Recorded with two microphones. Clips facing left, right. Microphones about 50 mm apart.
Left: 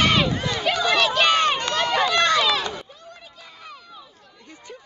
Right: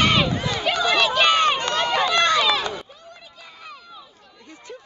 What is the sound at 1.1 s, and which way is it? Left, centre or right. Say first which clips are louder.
Run: right 1 dB; right.